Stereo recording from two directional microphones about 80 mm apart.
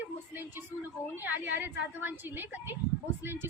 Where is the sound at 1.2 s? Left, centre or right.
Right.